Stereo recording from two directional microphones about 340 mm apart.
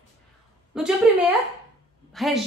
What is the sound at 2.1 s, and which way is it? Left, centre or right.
Speech, centre.